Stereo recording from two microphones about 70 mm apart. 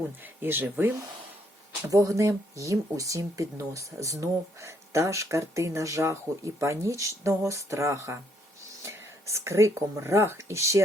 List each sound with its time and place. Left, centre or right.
0.2 s speech: right
1.9 s speech: right